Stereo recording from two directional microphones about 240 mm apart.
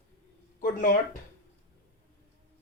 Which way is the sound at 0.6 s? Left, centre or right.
Left.